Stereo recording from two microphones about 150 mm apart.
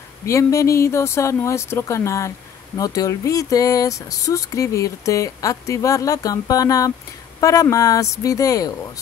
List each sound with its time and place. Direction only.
0.2 s speech: 20° left (ahead or behind)